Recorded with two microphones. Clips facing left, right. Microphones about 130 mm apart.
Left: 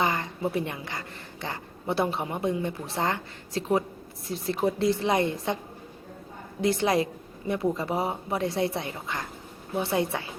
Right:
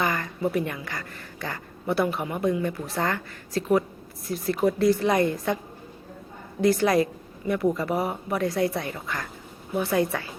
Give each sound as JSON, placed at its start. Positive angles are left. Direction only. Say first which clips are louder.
{"t": 0.0, "sound": "a woman's voice", "louder": "right 1 dB", "side_deg": 25}
{"t": 6.6, "sound": "a woman's voice", "louder": "right 3 dB", "side_deg": 25}